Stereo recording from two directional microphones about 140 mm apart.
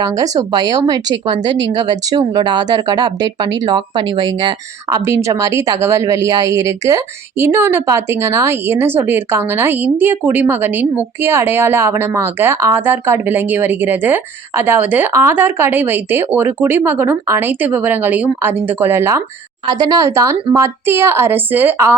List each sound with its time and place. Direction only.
0.2 s speech: 30° right (ahead or behind)
19.6 s speech: 30° right (ahead or behind)